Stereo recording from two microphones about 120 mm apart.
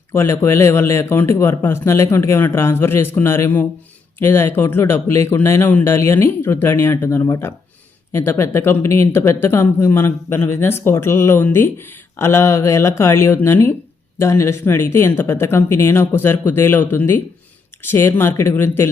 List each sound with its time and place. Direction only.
0.1 s speech: 20° left (ahead or behind)